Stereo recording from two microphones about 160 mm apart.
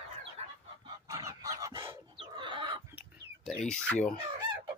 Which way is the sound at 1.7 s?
30° right (ahead or behind).